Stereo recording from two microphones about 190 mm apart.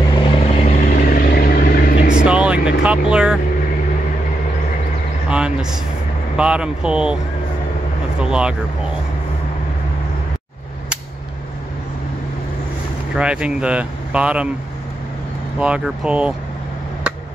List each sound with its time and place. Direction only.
0.2 s vehicle: 30° left (ahead or behind); by 2.2 s 50° left (ahead or behind)
2.2 s vehicle: 5° right (ahead or behind)
5.3 s speech: 5° right (ahead or behind)
8.2 s speech: 5° right (ahead or behind)
13.1 s speech: 5° right (ahead or behind)
15.6 s speech: 5° right (ahead or behind)